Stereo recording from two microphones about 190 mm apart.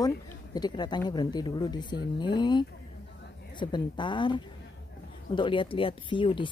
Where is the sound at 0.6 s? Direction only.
20° left (ahead or behind).